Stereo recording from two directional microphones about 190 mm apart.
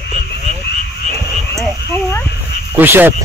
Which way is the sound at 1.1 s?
Centre (ahead or behind).